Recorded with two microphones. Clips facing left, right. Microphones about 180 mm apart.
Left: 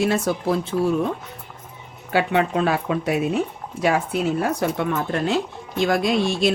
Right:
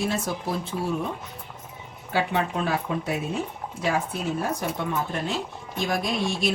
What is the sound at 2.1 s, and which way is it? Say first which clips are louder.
Speech: left 5 dB; 80° left.